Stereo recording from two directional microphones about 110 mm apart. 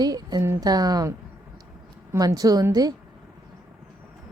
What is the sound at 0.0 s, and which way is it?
Speech, 35° right (ahead or behind).